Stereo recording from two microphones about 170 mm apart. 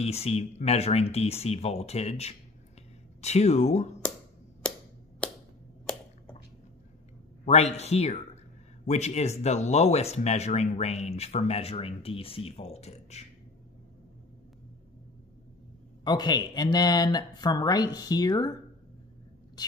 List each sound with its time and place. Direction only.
0.0 s speech: 35° left (ahead or behind)
5.2 s a sound: 5° left (ahead or behind)
7.4 s speech: 40° left (ahead or behind)
16.0 s speech: 25° left (ahead or behind)